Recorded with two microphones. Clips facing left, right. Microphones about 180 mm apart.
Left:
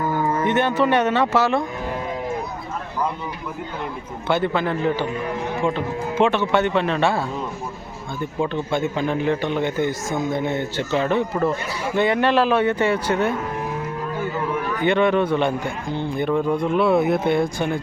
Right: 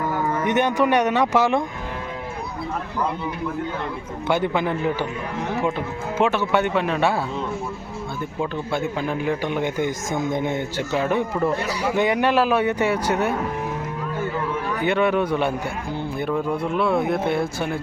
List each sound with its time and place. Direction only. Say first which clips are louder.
0.4 s a man's voice: right 1 dB; 15° right (ahead or behind)
4.3 s a man's voice: left 1 dB; 10° right (ahead or behind)
8.4 s a man's voice: left 3 dB; centre (ahead or behind)
14.8 s a man's voice: left 2 dB; 5° right (ahead or behind)